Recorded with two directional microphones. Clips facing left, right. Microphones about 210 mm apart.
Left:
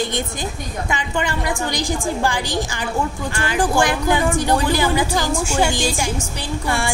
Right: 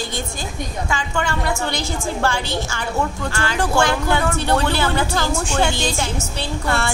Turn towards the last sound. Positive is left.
turn(degrees=10)  # may be behind; listen again after turning